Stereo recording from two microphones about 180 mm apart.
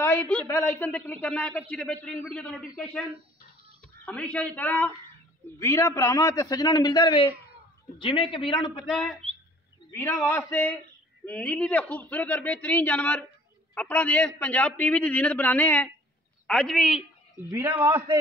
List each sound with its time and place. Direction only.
0.0 s a woman's voice: 10° left (ahead or behind)
8.8 s speech: centre (ahead or behind)
9.9 s a man's voice: 15° left (ahead or behind)
17.5 s a man's voice: 10° right (ahead or behind)